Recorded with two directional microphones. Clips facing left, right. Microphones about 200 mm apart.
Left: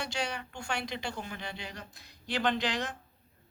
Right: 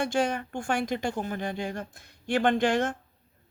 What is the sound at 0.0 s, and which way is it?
Speech, 50° right (ahead or behind).